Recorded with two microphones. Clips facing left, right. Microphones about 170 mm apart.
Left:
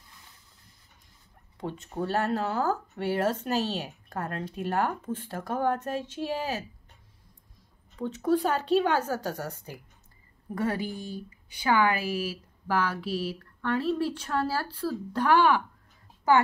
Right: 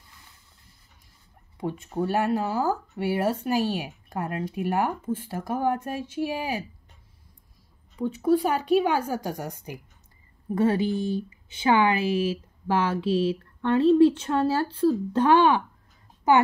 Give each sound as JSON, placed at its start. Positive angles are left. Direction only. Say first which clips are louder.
{"t": 1.6, "sound": "speech", "louder": "right 4 dB", "side_deg": -10}
{"t": 8.0, "sound": "speech", "louder": "right 3 dB", "side_deg": -10}